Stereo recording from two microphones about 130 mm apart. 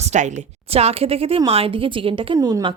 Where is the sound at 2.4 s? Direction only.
25° right (ahead or behind).